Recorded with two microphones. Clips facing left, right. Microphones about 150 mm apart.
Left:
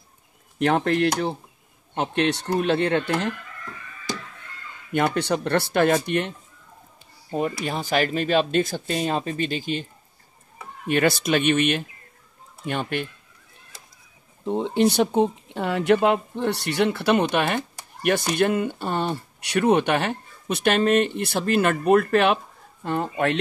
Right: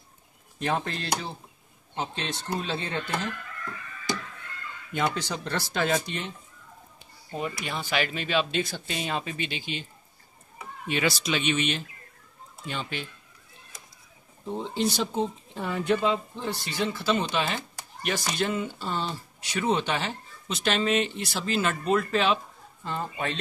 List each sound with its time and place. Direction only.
0.6 s speech: 70° left (ahead or behind)
4.9 s speech: 60° left (ahead or behind)
7.3 s speech: 40° left (ahead or behind)
10.9 s speech: 55° left (ahead or behind)
14.4 s speech: 60° left (ahead or behind)